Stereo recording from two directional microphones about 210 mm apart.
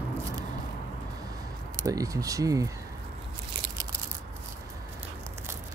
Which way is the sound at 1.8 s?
15° right (ahead or behind).